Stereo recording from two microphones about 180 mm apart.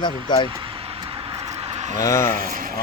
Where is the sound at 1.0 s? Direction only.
25° right (ahead or behind).